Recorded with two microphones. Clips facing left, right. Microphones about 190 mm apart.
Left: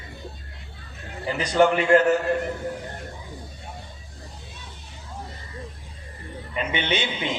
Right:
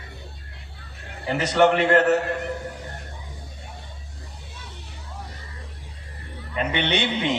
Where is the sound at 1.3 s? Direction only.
70° right (ahead or behind).